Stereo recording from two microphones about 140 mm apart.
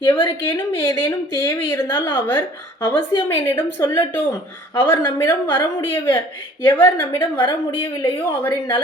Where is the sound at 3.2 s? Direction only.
15° left (ahead or behind).